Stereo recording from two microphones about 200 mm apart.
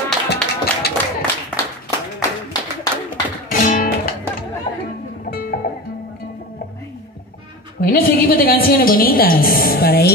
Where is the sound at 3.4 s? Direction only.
40° left (ahead or behind).